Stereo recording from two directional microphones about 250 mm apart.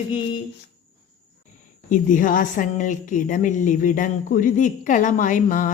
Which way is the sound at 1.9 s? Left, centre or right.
Left.